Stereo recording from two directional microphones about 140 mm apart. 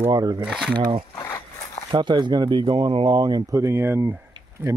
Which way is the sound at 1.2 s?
20° left (ahead or behind).